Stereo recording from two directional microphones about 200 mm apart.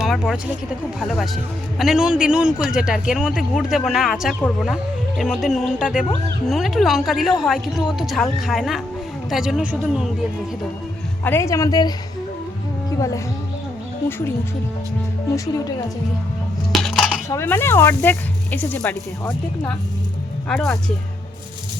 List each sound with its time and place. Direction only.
0.9 s speech: centre (ahead or behind)
11.2 s speech: 10° left (ahead or behind)
13.0 s speech: 15° left (ahead or behind)
16.7 s dishes: centre (ahead or behind)
17.2 s speech: 10° left (ahead or behind)